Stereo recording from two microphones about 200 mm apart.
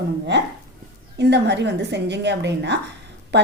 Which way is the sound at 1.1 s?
60° right (ahead or behind).